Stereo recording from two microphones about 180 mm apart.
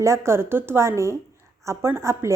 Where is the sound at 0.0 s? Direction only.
15° right (ahead or behind).